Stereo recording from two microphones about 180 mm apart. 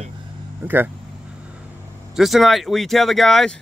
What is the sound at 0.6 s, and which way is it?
Speech, 15° right (ahead or behind).